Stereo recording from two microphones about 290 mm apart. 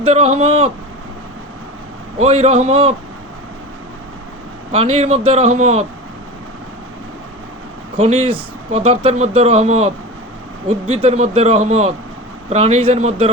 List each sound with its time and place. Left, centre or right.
0.0 s speech: right
2.1 s speech: right
4.7 s speech: centre
7.9 s speech: centre